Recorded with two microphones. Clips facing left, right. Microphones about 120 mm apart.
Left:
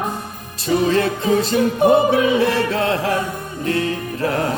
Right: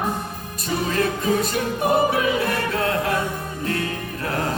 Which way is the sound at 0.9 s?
30° left (ahead or behind).